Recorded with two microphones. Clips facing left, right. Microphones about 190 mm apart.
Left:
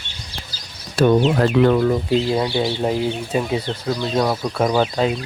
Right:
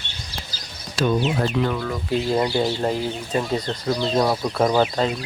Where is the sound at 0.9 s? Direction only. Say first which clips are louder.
Left 6 dB; 60° left (ahead or behind).